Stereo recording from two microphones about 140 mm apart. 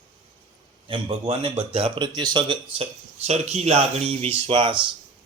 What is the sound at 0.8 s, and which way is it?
Speech, 40° right (ahead or behind).